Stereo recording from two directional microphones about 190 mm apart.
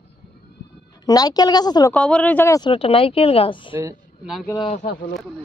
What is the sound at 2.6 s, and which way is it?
Speech, 30° left (ahead or behind).